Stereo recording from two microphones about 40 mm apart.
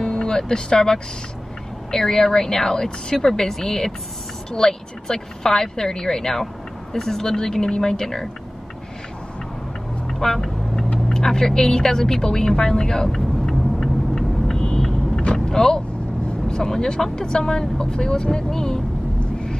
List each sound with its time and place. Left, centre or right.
0.0 s speech: centre
10.0 s vehicle: centre
11.1 s a sound: centre
15.3 s vehicle: centre
16.4 s speech: centre